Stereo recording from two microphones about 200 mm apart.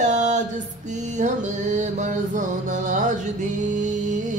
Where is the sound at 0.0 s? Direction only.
35° right (ahead or behind).